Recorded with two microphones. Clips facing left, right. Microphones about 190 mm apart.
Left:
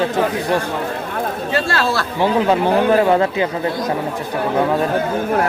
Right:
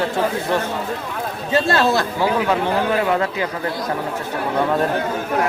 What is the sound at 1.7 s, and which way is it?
Speech, 20° right (ahead or behind).